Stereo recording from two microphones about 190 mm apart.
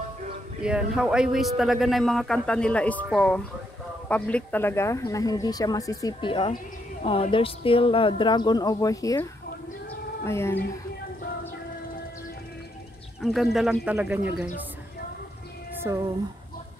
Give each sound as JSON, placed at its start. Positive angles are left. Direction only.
{"t": 0.6, "sound": "speech", "side_deg": -5}
{"t": 13.2, "sound": "speech", "side_deg": 0}
{"t": 15.9, "sound": "speech", "side_deg": -15}